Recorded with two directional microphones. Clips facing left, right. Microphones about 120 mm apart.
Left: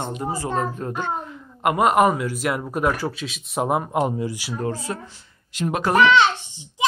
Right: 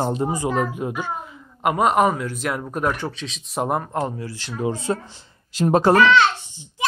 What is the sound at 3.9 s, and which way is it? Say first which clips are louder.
Speech: left 3 dB; 20° left (ahead or behind).